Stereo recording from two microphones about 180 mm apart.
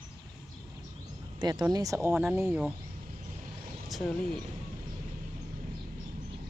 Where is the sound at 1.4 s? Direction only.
20° right (ahead or behind).